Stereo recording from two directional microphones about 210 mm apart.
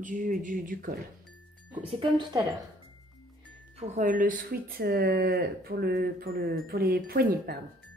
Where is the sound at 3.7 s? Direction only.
35° right (ahead or behind).